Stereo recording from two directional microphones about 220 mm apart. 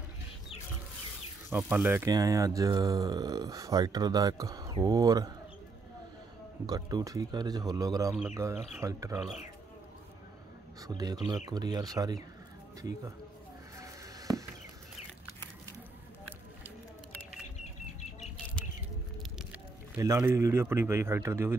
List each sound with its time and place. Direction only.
1.5 s speech: 5° right (ahead or behind)
6.6 s speech: 15° right (ahead or behind)
10.8 s speech: 15° right (ahead or behind)
13.7 s a sound: 15° right (ahead or behind)
20.0 s speech: 15° right (ahead or behind)